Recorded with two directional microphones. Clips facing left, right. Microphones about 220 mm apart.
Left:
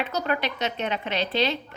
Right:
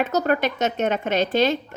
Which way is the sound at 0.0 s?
45° right (ahead or behind).